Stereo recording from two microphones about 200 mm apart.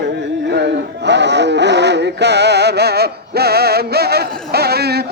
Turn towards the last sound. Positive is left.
turn(degrees=-55)  # may be behind; listen again after turning